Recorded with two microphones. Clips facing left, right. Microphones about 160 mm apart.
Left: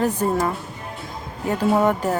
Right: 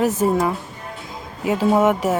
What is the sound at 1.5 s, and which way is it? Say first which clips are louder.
Speech: right 2 dB; centre (ahead or behind).